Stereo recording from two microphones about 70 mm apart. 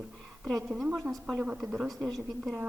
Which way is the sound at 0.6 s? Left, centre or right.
Centre.